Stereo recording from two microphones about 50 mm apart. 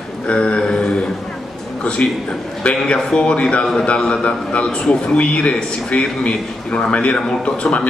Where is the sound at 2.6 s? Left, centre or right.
Left.